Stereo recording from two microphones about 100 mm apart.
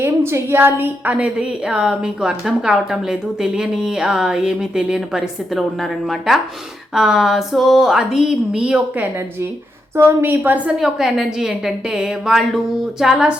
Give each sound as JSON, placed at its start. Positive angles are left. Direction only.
{"t": 0.0, "sound": "a woman's voice", "side_deg": -25}
{"t": 9.9, "sound": "a woman's voice", "side_deg": -25}
{"t": 10.8, "sound": "a woman's voice", "side_deg": -5}